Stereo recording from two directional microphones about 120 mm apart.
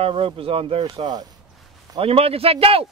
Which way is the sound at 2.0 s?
55° right (ahead or behind).